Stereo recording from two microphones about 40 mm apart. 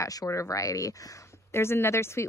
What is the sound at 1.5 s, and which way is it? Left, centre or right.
Speech, left.